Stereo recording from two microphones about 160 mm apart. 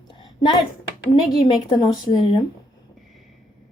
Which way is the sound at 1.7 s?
25° left (ahead or behind).